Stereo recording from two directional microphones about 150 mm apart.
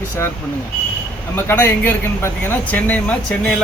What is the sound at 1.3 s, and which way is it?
Speech, 15° left (ahead or behind).